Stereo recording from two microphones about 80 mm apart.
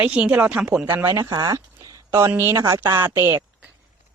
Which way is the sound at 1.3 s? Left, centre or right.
Right.